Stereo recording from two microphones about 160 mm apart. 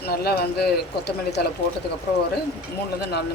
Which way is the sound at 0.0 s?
75° left (ahead or behind).